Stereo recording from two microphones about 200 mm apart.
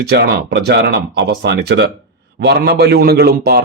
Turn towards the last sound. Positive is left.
turn(degrees=-50)  # may be behind; listen again after turning